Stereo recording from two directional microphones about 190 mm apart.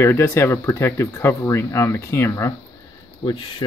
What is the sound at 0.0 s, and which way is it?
Speech, 15° left (ahead or behind).